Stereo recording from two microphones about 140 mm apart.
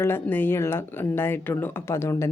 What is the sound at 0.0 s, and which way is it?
Speech, 15° left (ahead or behind).